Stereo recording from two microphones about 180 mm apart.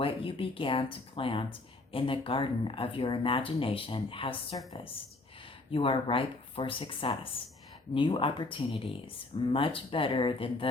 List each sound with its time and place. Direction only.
0.0 s speech: 30° left (ahead or behind)